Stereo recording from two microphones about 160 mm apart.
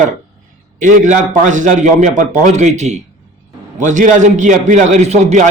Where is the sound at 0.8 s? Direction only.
50° right (ahead or behind).